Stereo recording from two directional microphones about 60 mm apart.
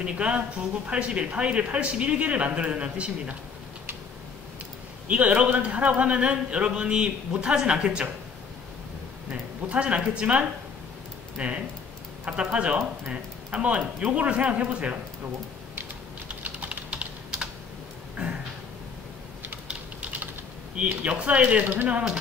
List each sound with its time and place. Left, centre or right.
0.0 s a man's voice: centre
5.0 s a man's voice: right
9.3 s a man's voice: right
16.4 s typing: right
18.1 s a sound: right
19.7 s typing: right
20.7 s a man's voice: right